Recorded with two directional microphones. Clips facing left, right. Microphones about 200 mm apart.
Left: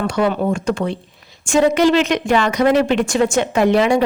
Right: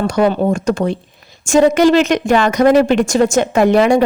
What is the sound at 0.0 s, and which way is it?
A woman's voice, 35° right (ahead or behind).